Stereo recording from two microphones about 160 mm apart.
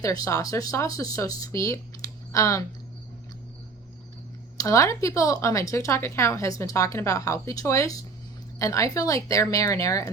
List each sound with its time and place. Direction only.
0.0 s speech: 20° left (ahead or behind)
4.5 s speech: 20° left (ahead or behind)